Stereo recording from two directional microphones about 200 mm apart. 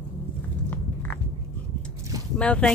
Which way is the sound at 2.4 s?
5° left (ahead or behind).